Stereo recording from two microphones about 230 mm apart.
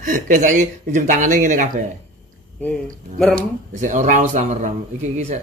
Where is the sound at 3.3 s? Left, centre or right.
Right.